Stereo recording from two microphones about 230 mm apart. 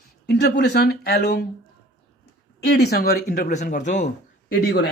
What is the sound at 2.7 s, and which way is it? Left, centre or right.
Speech, left.